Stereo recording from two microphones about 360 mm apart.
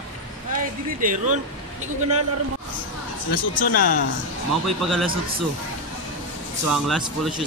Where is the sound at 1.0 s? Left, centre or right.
Right.